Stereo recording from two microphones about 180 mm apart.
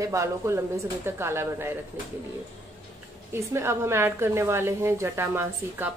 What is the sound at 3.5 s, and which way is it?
Speech, 15° right (ahead or behind).